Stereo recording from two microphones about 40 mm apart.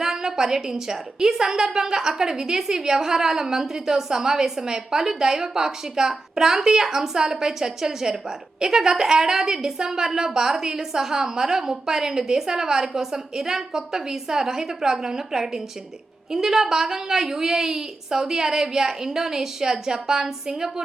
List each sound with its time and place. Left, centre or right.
0.0 s a woman's voice: centre